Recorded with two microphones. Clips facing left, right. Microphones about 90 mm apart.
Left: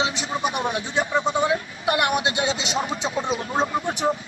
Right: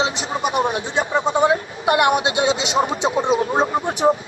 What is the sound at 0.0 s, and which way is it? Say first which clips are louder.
Speech: right 3 dB; 35° right (ahead or behind).